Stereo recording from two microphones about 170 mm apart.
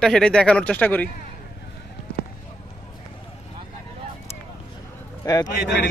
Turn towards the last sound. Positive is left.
turn(degrees=90)